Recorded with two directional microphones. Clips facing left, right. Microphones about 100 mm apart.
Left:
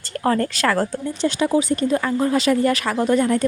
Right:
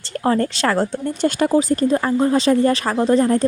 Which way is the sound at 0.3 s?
30° right (ahead or behind).